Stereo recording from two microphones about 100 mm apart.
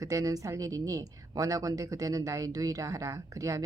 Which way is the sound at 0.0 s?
35° right (ahead or behind).